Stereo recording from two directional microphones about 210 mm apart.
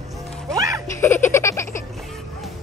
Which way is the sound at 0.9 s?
10° left (ahead or behind).